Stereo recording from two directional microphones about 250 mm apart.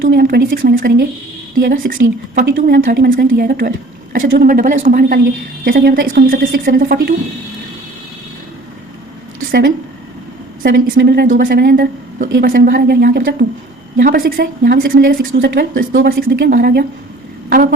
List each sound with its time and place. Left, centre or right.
0.0 s a woman's voice: right
4.2 s a woman's voice: right
4.4 s a woman's voice: right
9.5 s a woman's voice: right